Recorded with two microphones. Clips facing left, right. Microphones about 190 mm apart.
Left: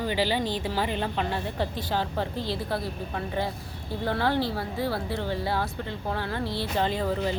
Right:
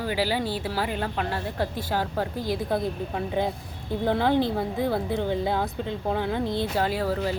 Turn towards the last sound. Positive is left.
turn(degrees=-5)  # may be behind; listen again after turning